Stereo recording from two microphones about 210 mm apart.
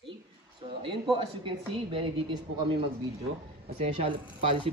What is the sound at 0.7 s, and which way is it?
Speech, 25° right (ahead or behind).